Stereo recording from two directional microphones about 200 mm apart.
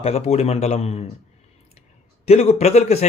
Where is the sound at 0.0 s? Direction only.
30° left (ahead or behind).